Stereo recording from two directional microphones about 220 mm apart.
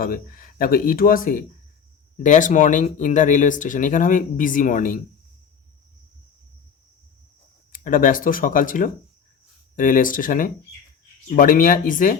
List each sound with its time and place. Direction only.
0.0 s speech: 40° left (ahead or behind)
7.7 s speech: 40° left (ahead or behind)